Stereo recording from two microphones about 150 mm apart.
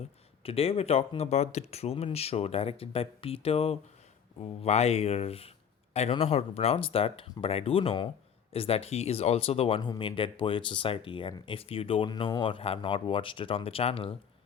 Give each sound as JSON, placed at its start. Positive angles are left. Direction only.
{"t": 0.0, "sound": "speech", "side_deg": 40}